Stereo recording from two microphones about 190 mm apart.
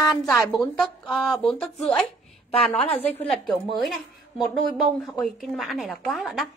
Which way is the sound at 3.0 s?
Centre (ahead or behind).